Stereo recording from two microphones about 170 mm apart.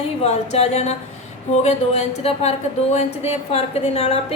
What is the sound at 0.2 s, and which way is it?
A woman's voice, 40° left (ahead or behind).